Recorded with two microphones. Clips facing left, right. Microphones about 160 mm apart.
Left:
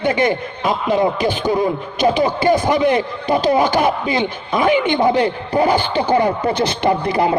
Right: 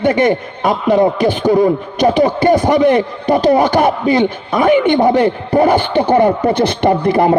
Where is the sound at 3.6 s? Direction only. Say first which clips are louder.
Right 3 dB; 55° right (ahead or behind).